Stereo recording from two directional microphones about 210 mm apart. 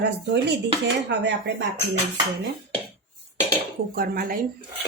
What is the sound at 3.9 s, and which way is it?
Speech, 45° right (ahead or behind).